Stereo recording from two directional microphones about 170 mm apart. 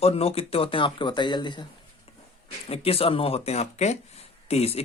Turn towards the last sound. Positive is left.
turn(degrees=35)  # may be behind; listen again after turning